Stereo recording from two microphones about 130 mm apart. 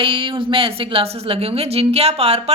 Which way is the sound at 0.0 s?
40° right (ahead or behind).